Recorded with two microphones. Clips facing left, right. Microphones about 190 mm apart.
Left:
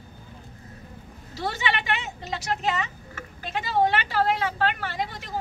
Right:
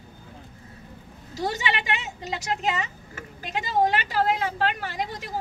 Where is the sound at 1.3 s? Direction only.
15° right (ahead or behind).